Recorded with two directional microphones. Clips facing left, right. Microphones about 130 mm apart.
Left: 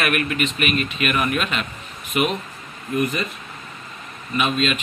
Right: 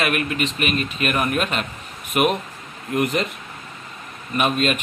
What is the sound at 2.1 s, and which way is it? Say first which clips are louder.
Speech: right 2 dB; 55° right (ahead or behind).